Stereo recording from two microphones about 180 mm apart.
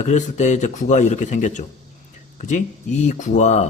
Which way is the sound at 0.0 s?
40° left (ahead or behind).